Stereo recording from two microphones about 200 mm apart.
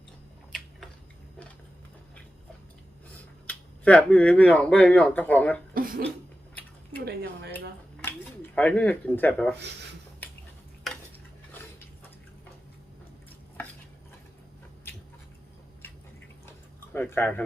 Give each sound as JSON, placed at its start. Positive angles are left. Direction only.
{"t": 3.4, "sound": "speech", "side_deg": 5}
{"t": 5.7, "sound": "a sound", "side_deg": -45}
{"t": 7.0, "sound": "speech", "side_deg": -55}
{"t": 8.0, "sound": "speech", "side_deg": 10}
{"t": 16.5, "sound": "tick-tock", "side_deg": 10}